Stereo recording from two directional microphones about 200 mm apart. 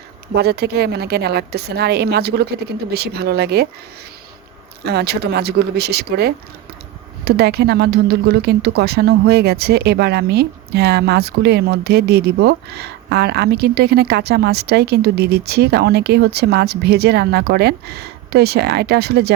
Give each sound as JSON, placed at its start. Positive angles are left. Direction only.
{"t": 0.3, "sound": "speech", "side_deg": -50}
{"t": 4.8, "sound": "speech", "side_deg": -55}